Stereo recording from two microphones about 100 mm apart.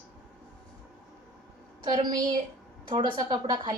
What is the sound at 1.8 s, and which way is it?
A woman's voice, 50° right (ahead or behind).